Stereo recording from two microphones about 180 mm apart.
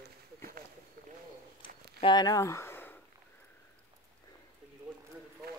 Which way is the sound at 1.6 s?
65° right (ahead or behind).